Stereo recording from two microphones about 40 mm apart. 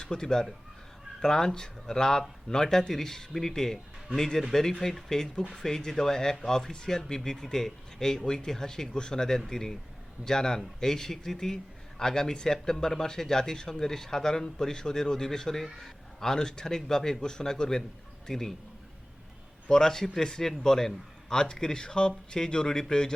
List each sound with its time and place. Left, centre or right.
0.0 s speech: centre
19.6 s speech: centre